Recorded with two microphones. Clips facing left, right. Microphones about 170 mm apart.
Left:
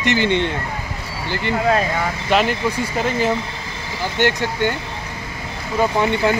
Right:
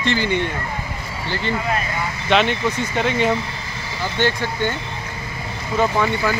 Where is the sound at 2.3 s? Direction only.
5° left (ahead or behind).